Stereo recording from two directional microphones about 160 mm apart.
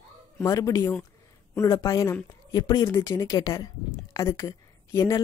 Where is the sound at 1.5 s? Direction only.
20° left (ahead or behind).